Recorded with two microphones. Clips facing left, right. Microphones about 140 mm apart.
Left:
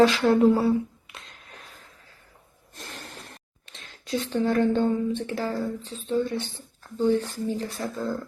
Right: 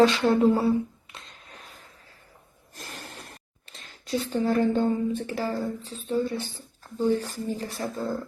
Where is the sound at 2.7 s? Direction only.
Centre (ahead or behind).